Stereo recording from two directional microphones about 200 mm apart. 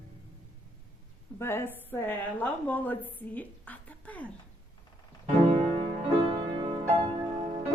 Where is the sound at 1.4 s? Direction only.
10° left (ahead or behind).